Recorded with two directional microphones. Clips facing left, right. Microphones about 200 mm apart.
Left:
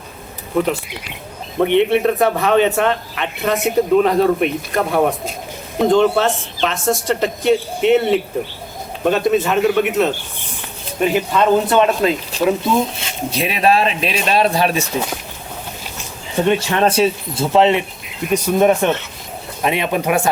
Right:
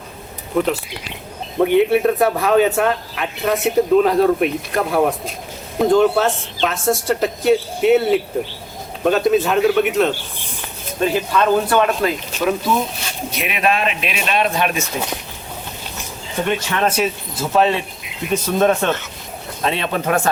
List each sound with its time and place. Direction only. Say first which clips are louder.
0.5 s speech: left 1 dB; centre (ahead or behind)
11.0 s speech: left 2 dB; 20° left (ahead or behind)
16.5 s speech: left 4 dB; 30° left (ahead or behind); by 20.3 s 10° left (ahead or behind)